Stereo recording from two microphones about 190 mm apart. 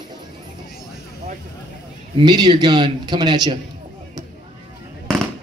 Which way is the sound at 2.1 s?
20° right (ahead or behind).